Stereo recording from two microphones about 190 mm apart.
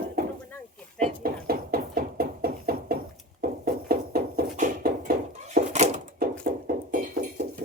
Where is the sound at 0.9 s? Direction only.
50° right (ahead or behind); by 6.0 s 35° right (ahead or behind).